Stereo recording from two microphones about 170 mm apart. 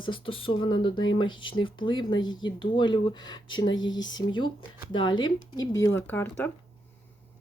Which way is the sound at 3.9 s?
90° left.